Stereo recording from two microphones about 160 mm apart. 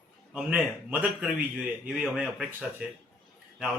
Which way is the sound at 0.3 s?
5° right (ahead or behind).